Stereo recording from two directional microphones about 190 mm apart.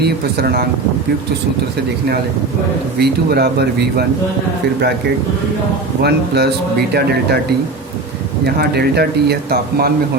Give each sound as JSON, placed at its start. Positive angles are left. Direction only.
{"t": 0.0, "sound": "speech", "side_deg": -55}
{"t": 3.0, "sound": "speech", "side_deg": -55}
{"t": 6.0, "sound": "speech", "side_deg": -60}
{"t": 8.4, "sound": "speech", "side_deg": -55}